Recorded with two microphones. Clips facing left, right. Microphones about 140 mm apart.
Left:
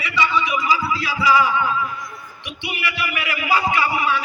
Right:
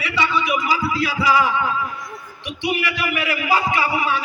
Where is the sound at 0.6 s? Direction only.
50° right (ahead or behind).